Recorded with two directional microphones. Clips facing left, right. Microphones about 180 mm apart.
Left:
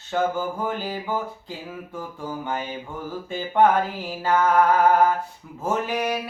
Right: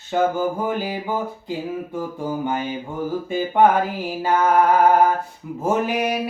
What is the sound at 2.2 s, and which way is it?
Music, 15° right (ahead or behind).